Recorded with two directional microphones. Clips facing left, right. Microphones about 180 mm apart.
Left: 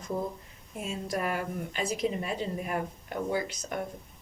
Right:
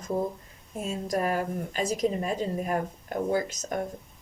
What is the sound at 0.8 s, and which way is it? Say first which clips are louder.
Speech: right 4 dB; 40° right (ahead or behind).